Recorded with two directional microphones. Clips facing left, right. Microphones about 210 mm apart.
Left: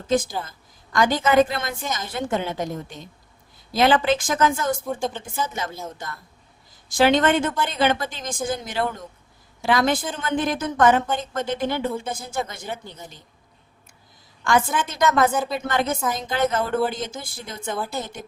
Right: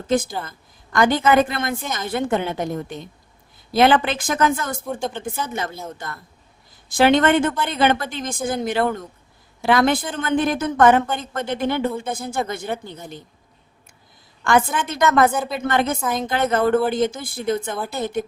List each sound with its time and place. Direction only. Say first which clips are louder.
0.1 s speech: right 1 dB; 55° right (ahead or behind)
6.8 s a woman's voice: right 2 dB; 60° right (ahead or behind)
14.4 s speech: right 2 dB; 55° right (ahead or behind)
15.3 s speech: even; centre (ahead or behind)
15.5 s speech: right 3 dB; 55° right (ahead or behind)